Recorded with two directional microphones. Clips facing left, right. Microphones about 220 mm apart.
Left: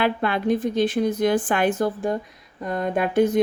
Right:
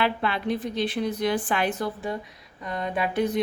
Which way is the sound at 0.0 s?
50° left (ahead or behind).